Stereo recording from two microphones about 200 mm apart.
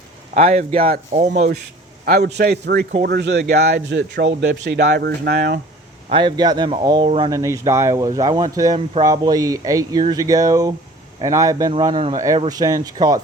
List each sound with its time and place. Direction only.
0.3 s speech: 35° right (ahead or behind)
2.0 s a man's voice: 50° right (ahead or behind)
6.1 s speech: 25° right (ahead or behind)